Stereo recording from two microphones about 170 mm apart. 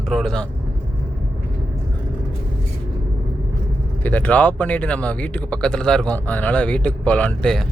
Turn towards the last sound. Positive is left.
turn(degrees=5)  # may be behind; listen again after turning